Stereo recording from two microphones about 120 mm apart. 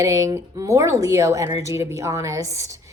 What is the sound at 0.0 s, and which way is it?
Speech, 25° right (ahead or behind).